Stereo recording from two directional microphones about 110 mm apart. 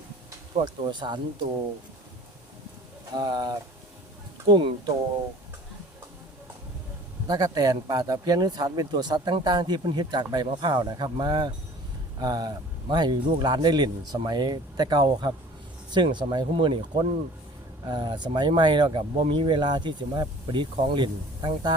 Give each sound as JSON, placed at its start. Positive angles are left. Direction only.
{"t": 0.5, "sound": "speech", "side_deg": -45}
{"t": 3.2, "sound": "speech", "side_deg": -40}
{"t": 7.3, "sound": "speech", "side_deg": -40}